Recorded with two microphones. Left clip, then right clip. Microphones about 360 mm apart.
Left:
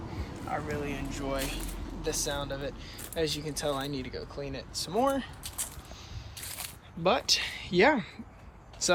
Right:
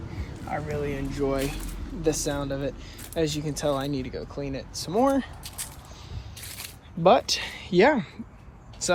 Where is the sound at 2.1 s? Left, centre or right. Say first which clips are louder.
Right 6 dB; centre.